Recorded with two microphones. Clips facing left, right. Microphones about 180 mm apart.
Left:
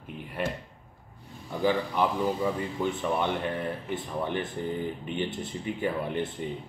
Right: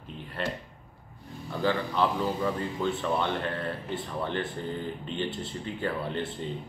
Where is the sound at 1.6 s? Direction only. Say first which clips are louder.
Left 1 dB; 15° left (ahead or behind).